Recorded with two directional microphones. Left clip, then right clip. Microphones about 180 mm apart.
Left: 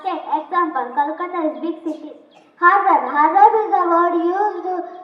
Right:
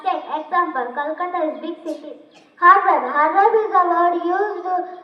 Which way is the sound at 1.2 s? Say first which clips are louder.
Even; 30° left (ahead or behind).